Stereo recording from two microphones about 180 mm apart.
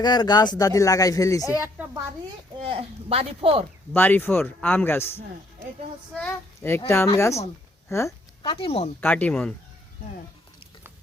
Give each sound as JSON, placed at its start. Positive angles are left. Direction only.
{"t": 0.0, "sound": "speech", "side_deg": 25}
{"t": 1.5, "sound": "a woman's voice", "side_deg": -10}
{"t": 2.6, "sound": "speech", "side_deg": -35}
{"t": 3.9, "sound": "speech", "side_deg": 10}
{"t": 8.4, "sound": "speech", "side_deg": 30}
{"t": 9.0, "sound": "speech", "side_deg": 10}